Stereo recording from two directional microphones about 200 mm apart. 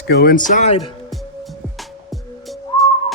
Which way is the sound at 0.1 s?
50° left (ahead or behind).